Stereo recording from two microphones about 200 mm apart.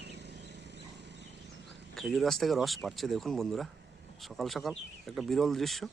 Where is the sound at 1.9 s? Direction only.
Centre (ahead or behind).